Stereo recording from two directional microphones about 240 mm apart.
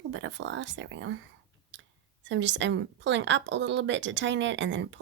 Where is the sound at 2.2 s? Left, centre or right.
Right.